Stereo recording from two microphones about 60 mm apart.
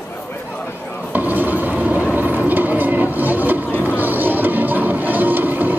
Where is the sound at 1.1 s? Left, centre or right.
Right.